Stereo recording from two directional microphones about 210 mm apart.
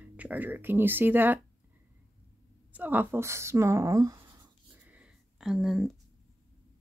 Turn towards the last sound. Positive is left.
turn(degrees=0)  # may be behind; listen again after turning